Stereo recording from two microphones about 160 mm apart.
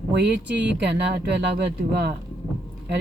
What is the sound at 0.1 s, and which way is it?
Speech, 90° right.